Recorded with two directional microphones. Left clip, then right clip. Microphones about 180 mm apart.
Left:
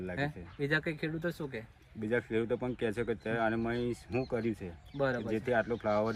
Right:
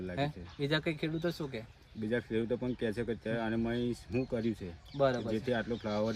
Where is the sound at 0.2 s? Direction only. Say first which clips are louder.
Right 1 dB; 15° right (ahead or behind).